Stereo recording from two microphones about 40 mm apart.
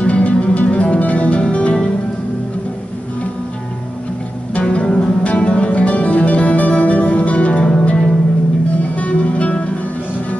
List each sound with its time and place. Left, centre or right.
0.0 s music: left
4.6 s music: left